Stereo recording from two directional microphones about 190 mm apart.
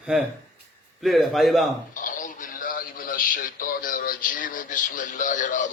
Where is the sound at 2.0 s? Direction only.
45° left (ahead or behind).